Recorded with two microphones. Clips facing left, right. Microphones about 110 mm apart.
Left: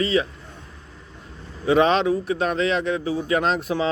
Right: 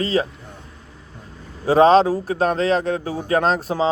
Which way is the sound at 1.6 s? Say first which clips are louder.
Right 5 dB; 35° right (ahead or behind).